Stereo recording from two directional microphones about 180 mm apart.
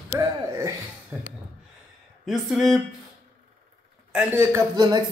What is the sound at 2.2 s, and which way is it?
Speech, centre (ahead or behind).